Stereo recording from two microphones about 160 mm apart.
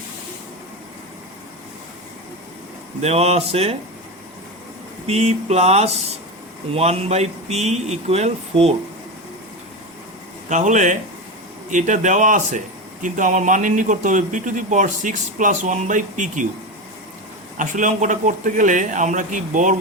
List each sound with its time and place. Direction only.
3.0 s speech: 40° right (ahead or behind)
5.0 s speech: 40° right (ahead or behind)
10.5 s a man's voice: 50° right (ahead or behind)
17.6 s a man's voice: 50° right (ahead or behind)